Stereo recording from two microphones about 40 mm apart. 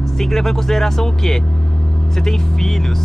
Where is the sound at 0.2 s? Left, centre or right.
Centre.